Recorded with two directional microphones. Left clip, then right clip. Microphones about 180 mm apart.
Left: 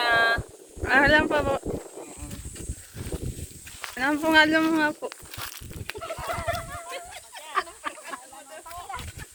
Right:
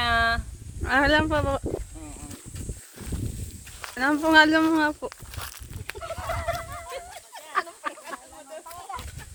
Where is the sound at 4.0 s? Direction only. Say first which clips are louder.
Right 2 dB; 25° right (ahead or behind).